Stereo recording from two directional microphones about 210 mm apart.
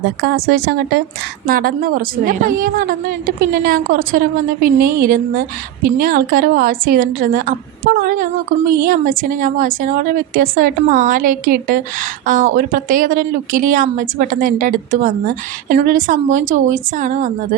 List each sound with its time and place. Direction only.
0.2 s a woman's voice: 50° right (ahead or behind)